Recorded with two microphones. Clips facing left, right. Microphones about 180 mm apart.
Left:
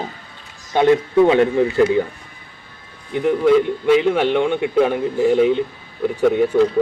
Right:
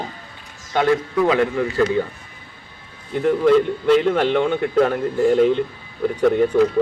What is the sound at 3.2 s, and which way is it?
A man's voice, 10° left (ahead or behind).